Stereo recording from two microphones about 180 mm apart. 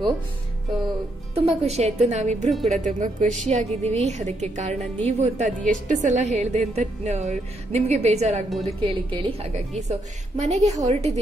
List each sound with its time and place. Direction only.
1.3 s a woman's voice: 35° right (ahead or behind)
8.5 s a woman's voice: centre (ahead or behind)
8.8 s a woman's voice: 30° right (ahead or behind)